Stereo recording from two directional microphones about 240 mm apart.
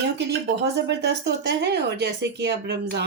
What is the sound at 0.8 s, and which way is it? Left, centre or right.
Speech, right.